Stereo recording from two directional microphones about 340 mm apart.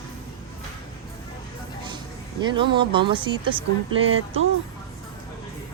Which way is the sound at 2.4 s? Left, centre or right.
Centre.